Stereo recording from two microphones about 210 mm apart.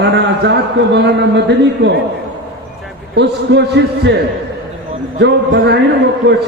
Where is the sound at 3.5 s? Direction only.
55° right (ahead or behind).